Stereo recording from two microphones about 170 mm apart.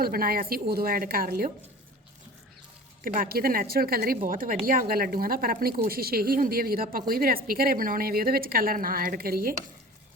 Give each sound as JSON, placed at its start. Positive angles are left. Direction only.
{"t": 0.0, "sound": "a woman's voice", "side_deg": -60}
{"t": 3.0, "sound": "a woman's voice", "side_deg": -60}